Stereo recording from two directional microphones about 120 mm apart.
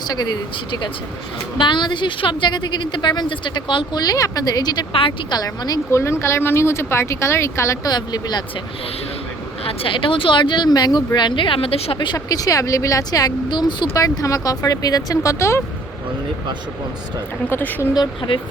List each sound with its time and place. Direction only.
1.5 s speech: 40° left (ahead or behind)
5.4 s speech: 30° left (ahead or behind)
7.9 s speech: 35° left (ahead or behind)
9.6 s speech: 45° left (ahead or behind); by 15.6 s 25° left (ahead or behind)
17.5 s speech: 15° left (ahead or behind)
17.9 s speech: 40° left (ahead or behind)